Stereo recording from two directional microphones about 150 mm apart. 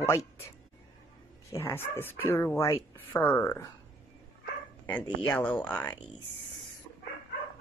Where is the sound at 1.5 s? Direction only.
20° left (ahead or behind).